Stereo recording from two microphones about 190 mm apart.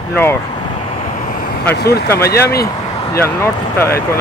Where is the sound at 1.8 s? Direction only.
60° left (ahead or behind).